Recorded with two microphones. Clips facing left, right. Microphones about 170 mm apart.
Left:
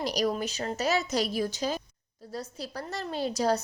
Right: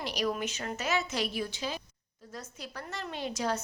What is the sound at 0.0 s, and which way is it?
A woman's voice, 40° left (ahead or behind).